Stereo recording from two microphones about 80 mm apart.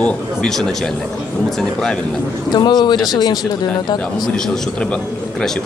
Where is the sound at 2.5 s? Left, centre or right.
Left.